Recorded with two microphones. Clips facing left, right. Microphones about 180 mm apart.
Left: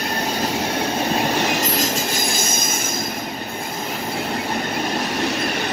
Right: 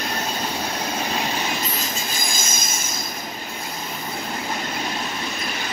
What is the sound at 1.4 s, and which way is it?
Train, 85° left.